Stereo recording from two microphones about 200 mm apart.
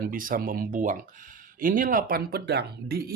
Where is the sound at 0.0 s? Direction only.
45° right (ahead or behind).